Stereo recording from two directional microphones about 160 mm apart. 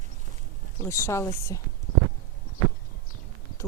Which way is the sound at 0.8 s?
15° left (ahead or behind).